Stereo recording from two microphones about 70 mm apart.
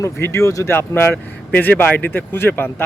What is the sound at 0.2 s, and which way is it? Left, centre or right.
Speech, left.